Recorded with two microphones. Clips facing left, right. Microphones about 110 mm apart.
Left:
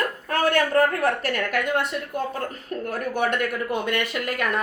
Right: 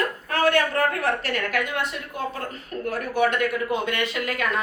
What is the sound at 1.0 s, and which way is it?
Speech, 50° left (ahead or behind).